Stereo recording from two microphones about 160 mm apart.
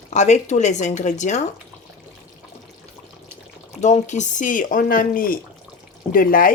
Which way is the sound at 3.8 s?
50° left (ahead or behind).